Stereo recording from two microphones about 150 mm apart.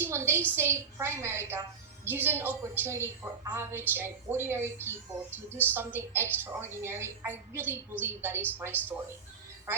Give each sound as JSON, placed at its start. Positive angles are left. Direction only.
{"t": 0.0, "sound": "a woman's voice", "side_deg": -15}